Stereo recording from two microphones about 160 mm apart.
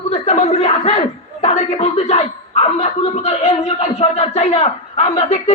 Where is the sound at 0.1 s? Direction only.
45° left (ahead or behind).